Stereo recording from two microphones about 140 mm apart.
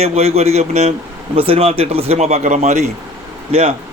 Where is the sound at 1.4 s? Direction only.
40° right (ahead or behind).